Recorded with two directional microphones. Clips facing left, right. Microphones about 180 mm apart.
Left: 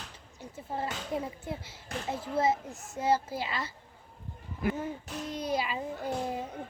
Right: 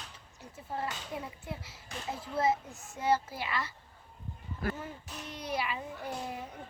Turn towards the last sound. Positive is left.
turn(degrees=25)  # may be behind; listen again after turning